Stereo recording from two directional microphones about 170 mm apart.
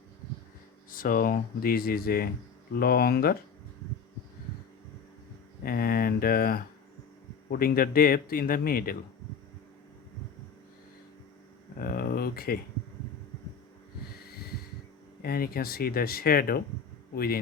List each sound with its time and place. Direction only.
0.9 s speech: 55° left (ahead or behind)
5.6 s speech: 60° left (ahead or behind)
11.8 s a sound: 60° left (ahead or behind)
15.2 s speech: 60° left (ahead or behind)